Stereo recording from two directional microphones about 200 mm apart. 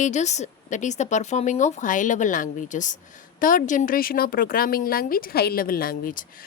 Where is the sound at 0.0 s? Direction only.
35° left (ahead or behind).